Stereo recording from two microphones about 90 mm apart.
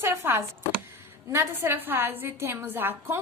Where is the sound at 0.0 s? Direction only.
25° right (ahead or behind).